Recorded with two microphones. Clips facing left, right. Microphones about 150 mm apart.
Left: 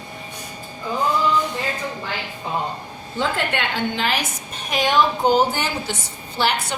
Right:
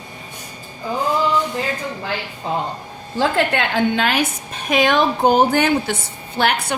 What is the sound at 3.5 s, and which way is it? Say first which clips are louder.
A woman's voice: right 5 dB; 55° right (ahead or behind).